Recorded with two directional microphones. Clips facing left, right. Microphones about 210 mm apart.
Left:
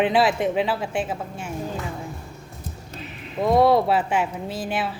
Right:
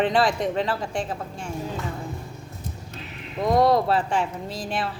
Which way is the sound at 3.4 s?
5° left (ahead or behind).